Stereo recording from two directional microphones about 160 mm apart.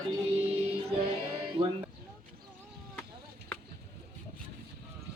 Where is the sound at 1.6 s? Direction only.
35° right (ahead or behind).